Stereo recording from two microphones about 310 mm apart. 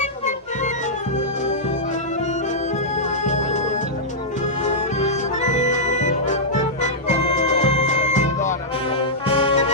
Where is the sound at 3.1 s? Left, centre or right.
Left.